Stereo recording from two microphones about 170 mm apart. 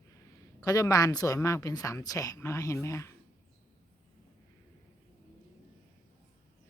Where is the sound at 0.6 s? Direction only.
20° left (ahead or behind).